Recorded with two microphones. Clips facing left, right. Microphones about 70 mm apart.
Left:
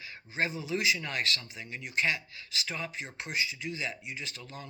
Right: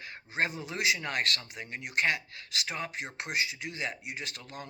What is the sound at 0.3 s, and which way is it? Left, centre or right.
Speech, right.